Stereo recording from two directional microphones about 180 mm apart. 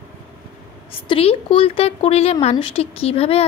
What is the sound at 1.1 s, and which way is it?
Speech, 30° left (ahead or behind).